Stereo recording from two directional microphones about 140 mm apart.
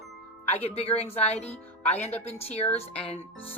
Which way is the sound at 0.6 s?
45° left (ahead or behind).